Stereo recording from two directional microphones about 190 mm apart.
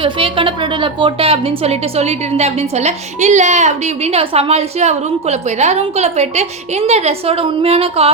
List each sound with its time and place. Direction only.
0.0 s a woman's voice: 25° right (ahead or behind)